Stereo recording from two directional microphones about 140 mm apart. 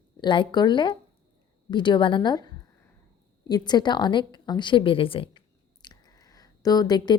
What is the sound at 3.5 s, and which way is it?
A woman's voice, 30° left (ahead or behind).